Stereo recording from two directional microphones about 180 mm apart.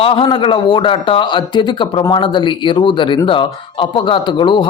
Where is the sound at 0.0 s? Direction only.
30° left (ahead or behind).